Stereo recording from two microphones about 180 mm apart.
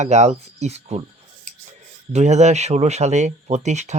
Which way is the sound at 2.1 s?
40° right (ahead or behind).